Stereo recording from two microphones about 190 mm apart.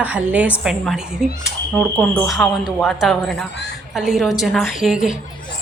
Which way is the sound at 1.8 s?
10° left (ahead or behind).